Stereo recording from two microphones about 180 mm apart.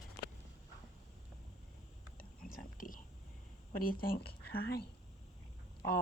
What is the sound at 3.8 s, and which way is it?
Speech, 55° left (ahead or behind).